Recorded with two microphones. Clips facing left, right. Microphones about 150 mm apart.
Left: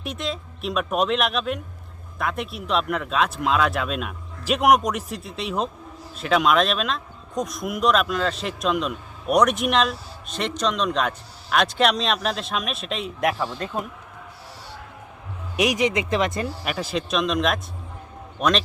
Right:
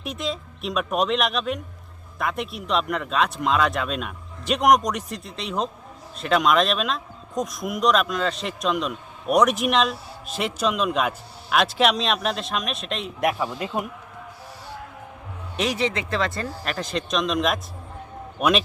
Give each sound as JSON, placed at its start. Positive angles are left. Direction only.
{"t": 0.0, "sound": "speech", "side_deg": 0}
{"t": 15.5, "sound": "speech", "side_deg": 15}
{"t": 16.6, "sound": "a man's voice", "side_deg": 5}